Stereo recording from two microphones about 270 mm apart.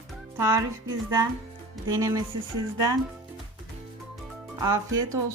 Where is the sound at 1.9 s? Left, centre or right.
Centre.